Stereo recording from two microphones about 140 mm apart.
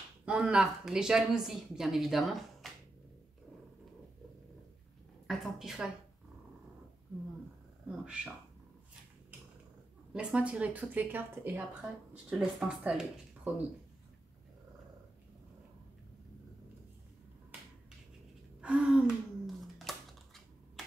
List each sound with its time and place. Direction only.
0.2 s speech: 5° right (ahead or behind)
5.2 s speech: centre (ahead or behind)
7.9 s speech: 5° right (ahead or behind)
10.1 s a woman's voice: 10° right (ahead or behind)
18.6 s a sound: 10° right (ahead or behind)